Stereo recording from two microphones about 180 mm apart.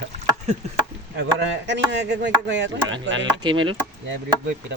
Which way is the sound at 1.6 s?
85° right.